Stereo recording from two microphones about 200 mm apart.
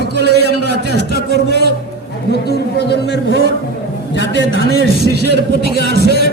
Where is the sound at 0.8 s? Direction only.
55° left (ahead or behind).